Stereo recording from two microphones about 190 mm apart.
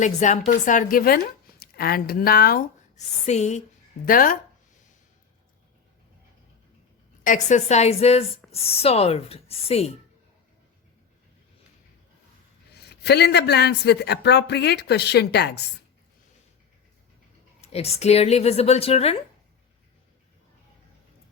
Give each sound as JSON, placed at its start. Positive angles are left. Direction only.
{"t": 0.0, "sound": "a woman's voice", "side_deg": 40}
{"t": 2.9, "sound": "a woman's voice", "side_deg": 35}
{"t": 4.0, "sound": "a woman's voice", "side_deg": 45}
{"t": 7.3, "sound": "a woman's voice", "side_deg": 40}
{"t": 12.7, "sound": "speech", "side_deg": 60}
{"t": 17.6, "sound": "a woman's voice", "side_deg": 35}